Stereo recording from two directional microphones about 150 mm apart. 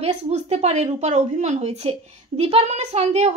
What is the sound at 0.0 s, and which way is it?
Speech, 45° right (ahead or behind).